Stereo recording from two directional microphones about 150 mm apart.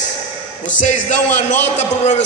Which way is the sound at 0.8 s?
50° left (ahead or behind).